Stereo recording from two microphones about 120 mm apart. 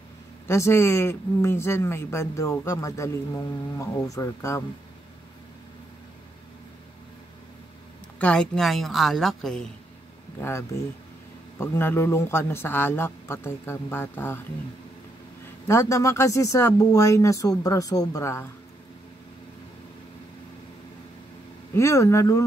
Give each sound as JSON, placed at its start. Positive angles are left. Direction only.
{"t": 0.5, "sound": "speech", "side_deg": 20}
{"t": 8.2, "sound": "a woman's voice", "side_deg": 5}
{"t": 11.5, "sound": "speech", "side_deg": 20}
{"t": 15.6, "sound": "speech", "side_deg": 25}
{"t": 21.7, "sound": "speech", "side_deg": 25}